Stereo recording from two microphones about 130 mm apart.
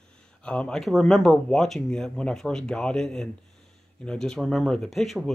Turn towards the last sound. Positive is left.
turn(degrees=0)  # may be behind; listen again after turning